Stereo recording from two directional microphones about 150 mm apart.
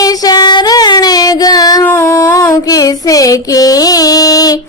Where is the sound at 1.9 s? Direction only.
15° left (ahead or behind).